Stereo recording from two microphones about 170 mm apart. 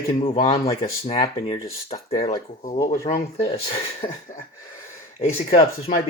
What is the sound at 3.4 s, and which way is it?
Speech, 35° left (ahead or behind).